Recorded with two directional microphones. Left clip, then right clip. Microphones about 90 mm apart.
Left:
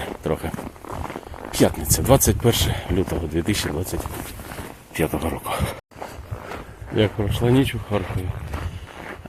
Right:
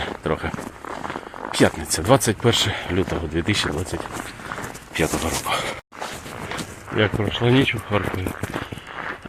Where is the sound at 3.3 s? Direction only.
60° left (ahead or behind).